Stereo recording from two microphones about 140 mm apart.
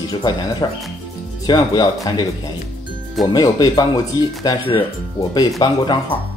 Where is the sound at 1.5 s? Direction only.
25° left (ahead or behind).